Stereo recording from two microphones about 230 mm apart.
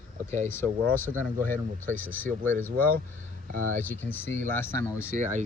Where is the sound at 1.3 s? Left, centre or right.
Right.